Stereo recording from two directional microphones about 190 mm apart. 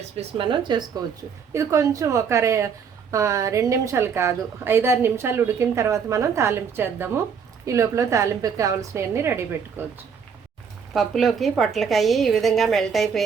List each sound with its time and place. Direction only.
0.2 s a woman's voice: 25° right (ahead or behind)
10.9 s a woman's voice: centre (ahead or behind)